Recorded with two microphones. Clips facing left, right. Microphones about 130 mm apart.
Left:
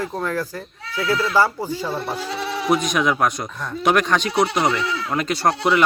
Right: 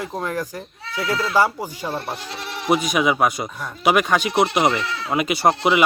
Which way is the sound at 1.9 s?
Centre (ahead or behind).